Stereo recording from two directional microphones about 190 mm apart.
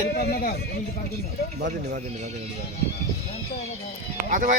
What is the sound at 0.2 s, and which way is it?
Speech, 55° left (ahead or behind).